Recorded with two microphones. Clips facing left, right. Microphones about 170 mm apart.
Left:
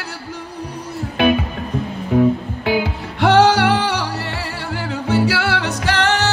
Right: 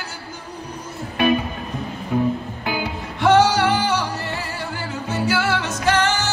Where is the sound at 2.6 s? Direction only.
70° left (ahead or behind).